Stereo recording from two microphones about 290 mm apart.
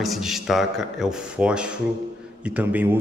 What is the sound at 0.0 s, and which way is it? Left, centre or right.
A man's voice, centre.